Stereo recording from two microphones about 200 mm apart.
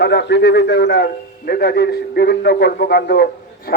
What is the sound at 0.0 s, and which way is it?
A man's voice, 55° left (ahead or behind).